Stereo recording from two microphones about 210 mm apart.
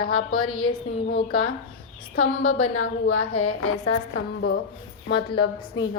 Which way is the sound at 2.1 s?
90° left.